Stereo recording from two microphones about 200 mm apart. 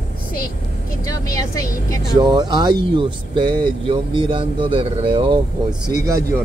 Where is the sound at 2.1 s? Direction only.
20° right (ahead or behind).